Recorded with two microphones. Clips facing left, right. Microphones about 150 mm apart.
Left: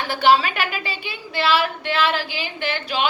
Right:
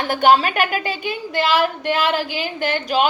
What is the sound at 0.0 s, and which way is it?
A woman's voice, 50° right (ahead or behind).